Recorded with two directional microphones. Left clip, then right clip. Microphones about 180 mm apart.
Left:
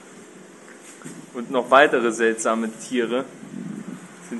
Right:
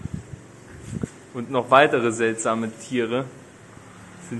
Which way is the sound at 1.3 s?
10° right (ahead or behind).